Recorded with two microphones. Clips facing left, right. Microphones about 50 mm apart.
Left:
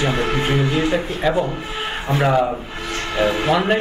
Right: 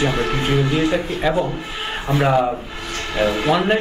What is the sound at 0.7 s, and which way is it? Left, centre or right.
A man's voice, centre.